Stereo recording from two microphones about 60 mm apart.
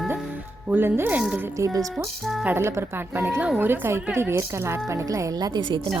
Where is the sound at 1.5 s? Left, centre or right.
Right.